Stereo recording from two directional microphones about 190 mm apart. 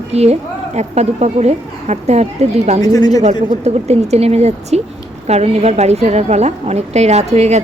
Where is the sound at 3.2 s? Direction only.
35° right (ahead or behind).